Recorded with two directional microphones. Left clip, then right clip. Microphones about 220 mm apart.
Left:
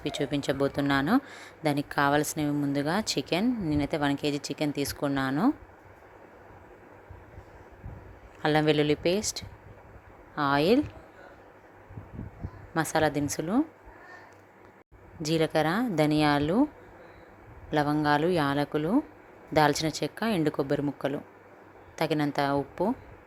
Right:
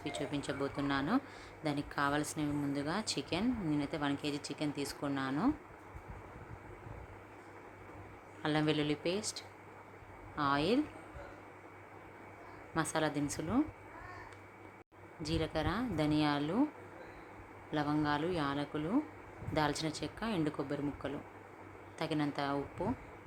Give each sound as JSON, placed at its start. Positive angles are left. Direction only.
{"t": 0.0, "sound": "speech", "side_deg": 30}
{"t": 8.4, "sound": "speech", "side_deg": 30}
{"t": 12.7, "sound": "speech", "side_deg": 25}
{"t": 15.2, "sound": "speech", "side_deg": 35}
{"t": 17.7, "sound": "speech", "side_deg": 30}